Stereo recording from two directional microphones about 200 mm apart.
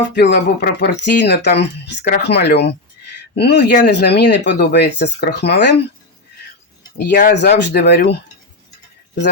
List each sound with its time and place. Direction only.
0.1 s speech: 60° left (ahead or behind)
7.1 s speech: 45° left (ahead or behind)